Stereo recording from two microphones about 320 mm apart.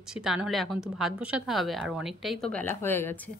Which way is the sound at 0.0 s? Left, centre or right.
Centre.